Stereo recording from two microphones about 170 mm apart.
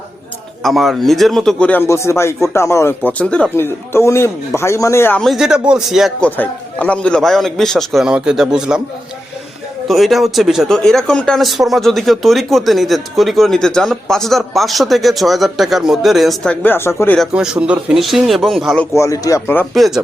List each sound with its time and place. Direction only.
0.6 s speech: centre (ahead or behind)
5.2 s speech: centre (ahead or behind)
9.8 s speech: centre (ahead or behind)
17.2 s speech: 5° right (ahead or behind)
18.9 s speech: 20° left (ahead or behind)
19.7 s speech: centre (ahead or behind)